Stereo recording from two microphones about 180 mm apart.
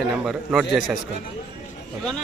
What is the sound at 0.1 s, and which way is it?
Speech, 5° right (ahead or behind).